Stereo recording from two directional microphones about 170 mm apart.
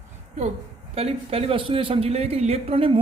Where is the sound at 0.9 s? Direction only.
35° right (ahead or behind).